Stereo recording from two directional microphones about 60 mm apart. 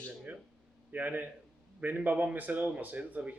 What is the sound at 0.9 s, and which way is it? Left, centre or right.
Speech, right.